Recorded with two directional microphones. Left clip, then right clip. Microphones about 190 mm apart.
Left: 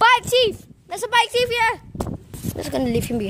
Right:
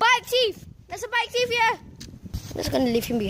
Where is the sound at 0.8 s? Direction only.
35° left (ahead or behind).